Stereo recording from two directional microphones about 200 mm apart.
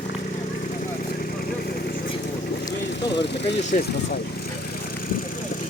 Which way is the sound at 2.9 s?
60° left (ahead or behind).